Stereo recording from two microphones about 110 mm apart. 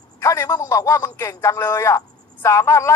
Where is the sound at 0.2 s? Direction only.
25° left (ahead or behind).